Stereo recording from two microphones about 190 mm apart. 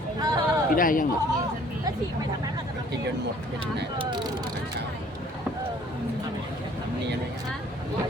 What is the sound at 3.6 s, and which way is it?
Speech, 25° right (ahead or behind).